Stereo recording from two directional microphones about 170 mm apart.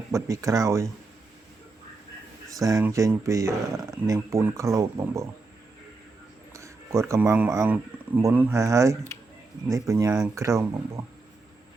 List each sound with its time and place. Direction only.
0.1 s speech: 20° right (ahead or behind)
2.5 s speech: 20° right (ahead or behind)
6.5 s speech: 15° right (ahead or behind)